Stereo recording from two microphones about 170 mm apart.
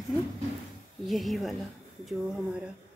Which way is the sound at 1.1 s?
Centre (ahead or behind).